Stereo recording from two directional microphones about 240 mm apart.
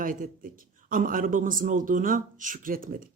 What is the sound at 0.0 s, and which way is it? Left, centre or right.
A woman's voice, right.